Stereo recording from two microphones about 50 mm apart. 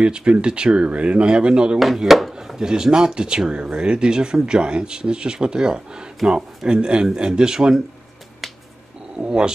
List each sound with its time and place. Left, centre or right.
0.0 s speech: centre
2.1 s speech: centre
2.6 s speech: centre
9.2 s speech: right